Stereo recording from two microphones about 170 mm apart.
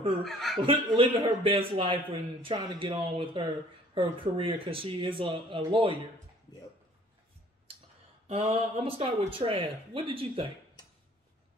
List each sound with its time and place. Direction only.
0.2 s speech: centre (ahead or behind)
0.6 s a man's voice: 30° right (ahead or behind)
8.3 s a man's voice: 35° right (ahead or behind)